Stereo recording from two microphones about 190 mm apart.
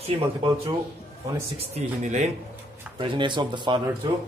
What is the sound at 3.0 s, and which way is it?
Speech, 25° right (ahead or behind).